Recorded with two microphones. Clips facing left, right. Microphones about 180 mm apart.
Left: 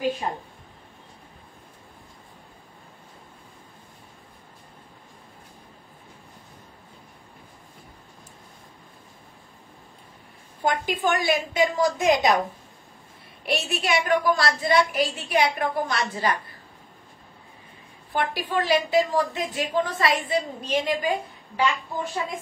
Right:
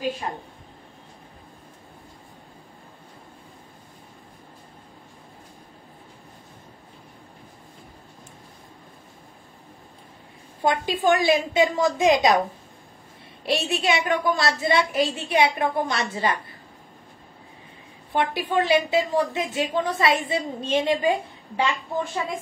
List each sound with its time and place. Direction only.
10.6 s a woman's voice: 25° right (ahead or behind)
13.5 s a woman's voice: 25° right (ahead or behind)
18.1 s a woman's voice: 25° right (ahead or behind)